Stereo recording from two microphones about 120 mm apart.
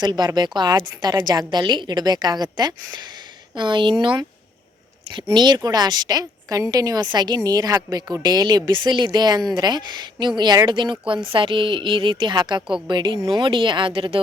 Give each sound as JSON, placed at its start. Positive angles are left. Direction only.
{"t": 0.0, "sound": "a woman's voice", "side_deg": -35}